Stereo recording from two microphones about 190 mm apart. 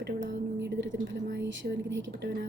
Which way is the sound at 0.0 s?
65° right (ahead or behind).